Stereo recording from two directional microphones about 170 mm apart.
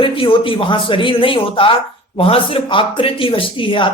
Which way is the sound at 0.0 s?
30° left (ahead or behind).